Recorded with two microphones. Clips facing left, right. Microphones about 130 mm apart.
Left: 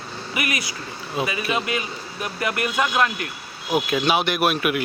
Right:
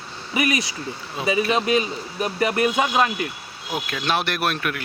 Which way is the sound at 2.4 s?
30° right (ahead or behind).